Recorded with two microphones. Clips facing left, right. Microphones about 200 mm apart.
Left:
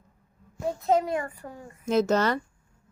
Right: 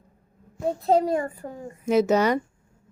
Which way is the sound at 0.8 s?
35° right (ahead or behind).